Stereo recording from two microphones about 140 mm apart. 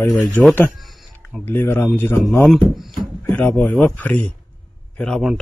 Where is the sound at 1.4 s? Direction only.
15° left (ahead or behind).